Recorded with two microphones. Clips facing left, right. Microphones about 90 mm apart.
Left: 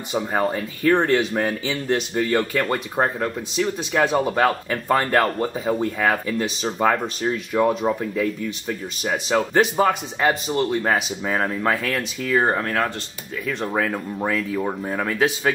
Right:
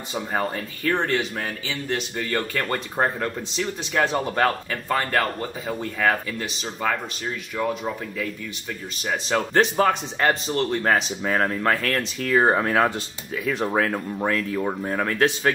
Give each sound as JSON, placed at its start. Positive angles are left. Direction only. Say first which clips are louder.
{"t": 0.1, "sound": "speech", "louder": "left 4 dB", "side_deg": 15}
{"t": 2.6, "sound": "speech", "louder": "left 2 dB", "side_deg": 5}
{"t": 4.6, "sound": "speech", "louder": "left 4 dB", "side_deg": 20}
{"t": 5.2, "sound": "speech", "louder": "left 5 dB", "side_deg": 30}
{"t": 5.8, "sound": "speech", "louder": "right 2 dB", "side_deg": 15}
{"t": 7.5, "sound": "speech", "louder": "left 6 dB", "side_deg": 20}